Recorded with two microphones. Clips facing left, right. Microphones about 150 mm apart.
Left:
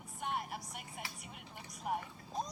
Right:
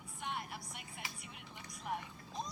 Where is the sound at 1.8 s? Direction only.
45° left (ahead or behind).